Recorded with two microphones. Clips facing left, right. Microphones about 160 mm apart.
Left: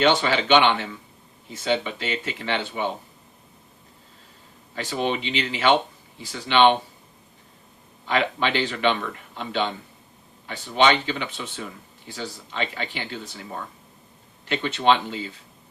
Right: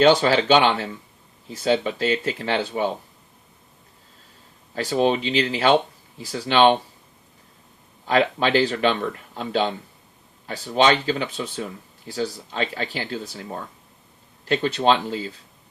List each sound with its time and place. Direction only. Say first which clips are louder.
0.0 s speech: right 4 dB; 40° right (ahead or behind)
4.7 s speech: right 6 dB; 40° right (ahead or behind)
8.0 s speech: right 4 dB; 40° right (ahead or behind)
14.4 s speech: right 2 dB; 40° right (ahead or behind)